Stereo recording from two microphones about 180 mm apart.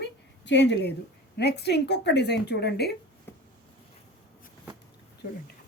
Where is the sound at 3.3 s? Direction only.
15° left (ahead or behind).